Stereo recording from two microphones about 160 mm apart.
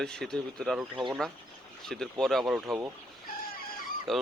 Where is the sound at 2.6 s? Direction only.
15° right (ahead or behind).